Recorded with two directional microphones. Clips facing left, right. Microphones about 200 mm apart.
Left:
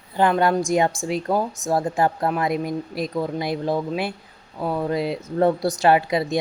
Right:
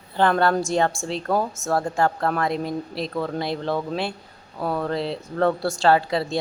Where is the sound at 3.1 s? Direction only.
15° left (ahead or behind).